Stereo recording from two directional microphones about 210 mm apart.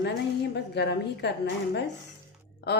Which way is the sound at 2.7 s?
50° left (ahead or behind).